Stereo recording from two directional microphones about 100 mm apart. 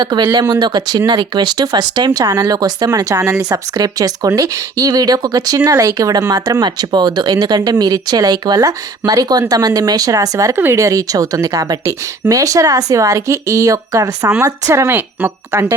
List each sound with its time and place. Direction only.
0.0 s speech: 45° right (ahead or behind); by 15.0 s 25° right (ahead or behind)